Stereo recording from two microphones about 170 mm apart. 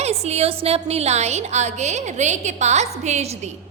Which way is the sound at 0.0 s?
40° right (ahead or behind).